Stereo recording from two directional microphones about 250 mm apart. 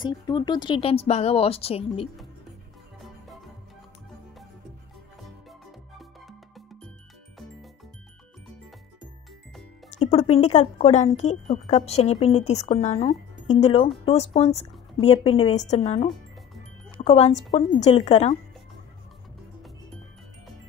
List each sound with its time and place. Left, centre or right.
0.0 s speech: centre
5.9 s music: centre
9.8 s music: left
10.4 s speech: left